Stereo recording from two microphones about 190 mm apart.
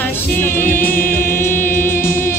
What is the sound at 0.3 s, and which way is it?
Music, 10° left (ahead or behind).